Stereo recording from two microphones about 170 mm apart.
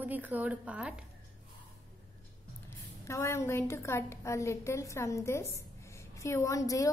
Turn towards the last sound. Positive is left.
turn(degrees=20)  # may be behind; listen again after turning